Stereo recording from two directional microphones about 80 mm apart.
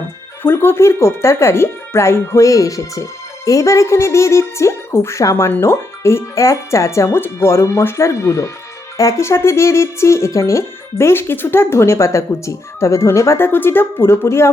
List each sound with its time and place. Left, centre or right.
0.4 s speech: left